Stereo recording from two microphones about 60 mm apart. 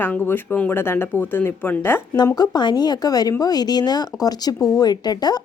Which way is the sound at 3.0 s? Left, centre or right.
Left.